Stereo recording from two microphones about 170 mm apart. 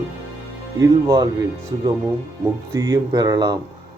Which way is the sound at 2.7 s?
20° right (ahead or behind).